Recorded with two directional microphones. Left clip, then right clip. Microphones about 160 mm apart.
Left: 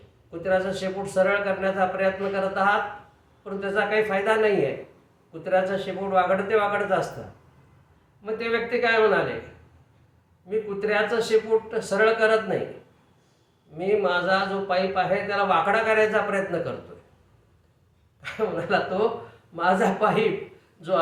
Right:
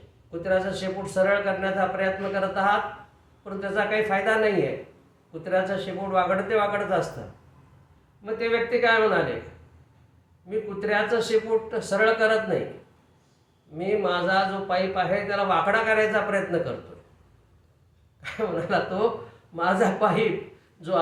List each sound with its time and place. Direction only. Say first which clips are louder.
0.3 s a man's voice: left 1 dB; 5° left (ahead or behind)
8.2 s a man's voice: right 1 dB; 5° left (ahead or behind)
10.5 s a man's voice: left 1 dB; 5° left (ahead or behind)
13.7 s a man's voice: left 2 dB; 5° left (ahead or behind)
18.2 s a man's voice: left 1 dB; 5° left (ahead or behind)